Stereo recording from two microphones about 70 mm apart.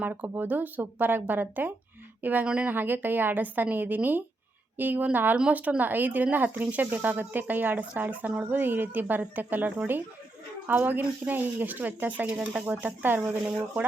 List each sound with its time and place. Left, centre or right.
0.0 s speech: right